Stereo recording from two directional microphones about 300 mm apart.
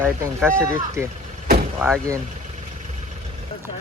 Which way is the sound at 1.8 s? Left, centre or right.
Centre.